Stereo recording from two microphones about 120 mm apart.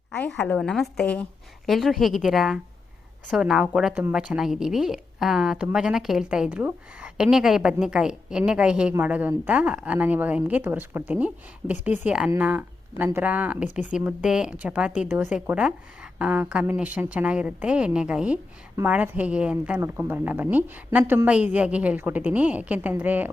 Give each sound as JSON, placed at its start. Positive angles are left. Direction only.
{"t": 0.3, "sound": "a woman's voice", "side_deg": 10}